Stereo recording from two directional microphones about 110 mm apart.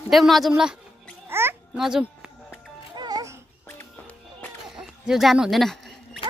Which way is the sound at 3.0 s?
35° right (ahead or behind).